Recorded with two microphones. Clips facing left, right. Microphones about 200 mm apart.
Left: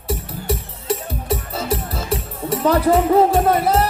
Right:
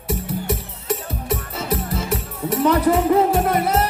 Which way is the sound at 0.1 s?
30° left (ahead or behind).